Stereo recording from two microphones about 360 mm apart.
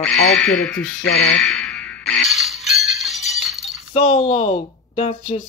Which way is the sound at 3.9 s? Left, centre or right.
Centre.